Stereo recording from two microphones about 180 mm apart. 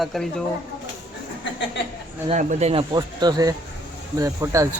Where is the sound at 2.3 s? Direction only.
40° right (ahead or behind).